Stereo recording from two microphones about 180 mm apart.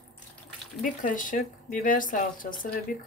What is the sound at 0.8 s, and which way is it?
Speech, 45° left (ahead or behind).